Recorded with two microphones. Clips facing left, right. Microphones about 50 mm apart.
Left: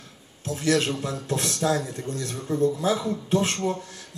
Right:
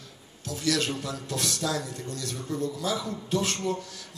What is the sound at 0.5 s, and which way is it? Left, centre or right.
A man's voice, left.